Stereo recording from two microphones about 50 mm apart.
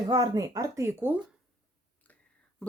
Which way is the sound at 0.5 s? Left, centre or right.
Right.